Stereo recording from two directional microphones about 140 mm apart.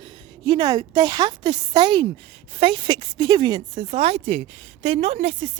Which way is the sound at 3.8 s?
45° right (ahead or behind).